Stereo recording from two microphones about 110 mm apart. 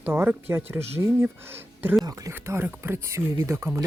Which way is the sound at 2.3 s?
20° right (ahead or behind).